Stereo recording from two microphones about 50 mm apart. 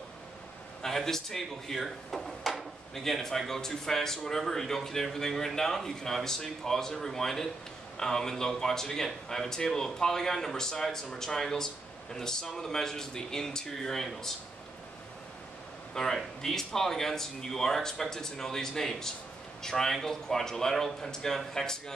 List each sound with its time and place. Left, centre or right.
0.8 s speech: centre
15.9 s speech: centre